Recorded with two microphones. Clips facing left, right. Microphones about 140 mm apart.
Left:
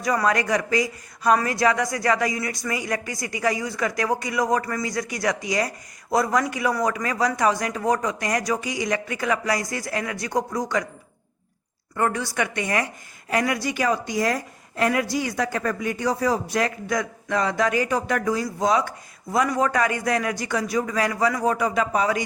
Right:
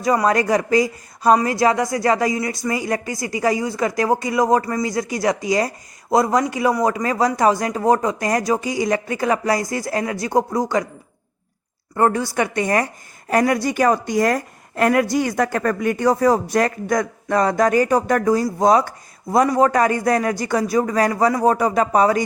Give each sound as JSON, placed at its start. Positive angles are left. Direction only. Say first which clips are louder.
{"t": 0.0, "sound": "speech", "louder": "right 5 dB", "side_deg": -25}
{"t": 11.9, "sound": "speech", "louder": "right 6 dB", "side_deg": -35}